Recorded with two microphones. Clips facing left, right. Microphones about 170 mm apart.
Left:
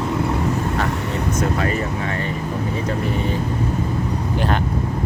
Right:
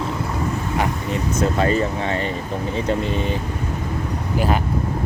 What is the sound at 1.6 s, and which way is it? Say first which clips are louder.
Speech: right 3 dB; 25° right (ahead or behind).